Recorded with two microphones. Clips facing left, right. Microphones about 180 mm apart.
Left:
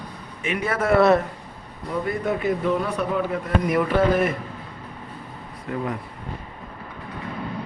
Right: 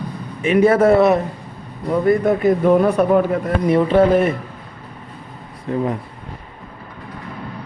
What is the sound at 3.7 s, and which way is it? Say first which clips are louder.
Speech: right 7 dB; 30° right (ahead or behind).